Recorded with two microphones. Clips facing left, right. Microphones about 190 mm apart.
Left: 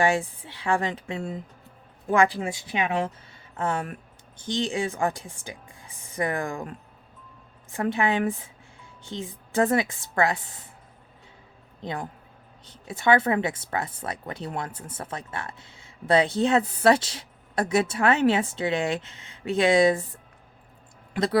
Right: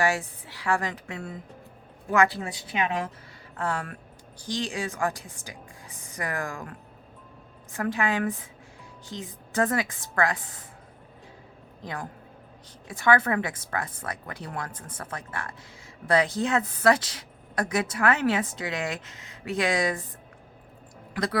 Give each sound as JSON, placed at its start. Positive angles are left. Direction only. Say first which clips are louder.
{"t": 0.0, "sound": "a woman's voice", "louder": "left 3 dB", "side_deg": 25}
{"t": 3.6, "sound": "a woman's voice", "louder": "left 3 dB", "side_deg": 20}
{"t": 11.8, "sound": "a man's voice", "louder": "left 3 dB", "side_deg": 25}
{"t": 21.1, "sound": "speech", "louder": "left 4 dB", "side_deg": 25}